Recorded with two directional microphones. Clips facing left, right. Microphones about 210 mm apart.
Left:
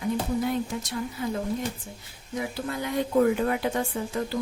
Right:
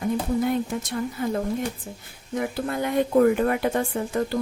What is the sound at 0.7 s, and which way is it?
Speech, 55° right (ahead or behind).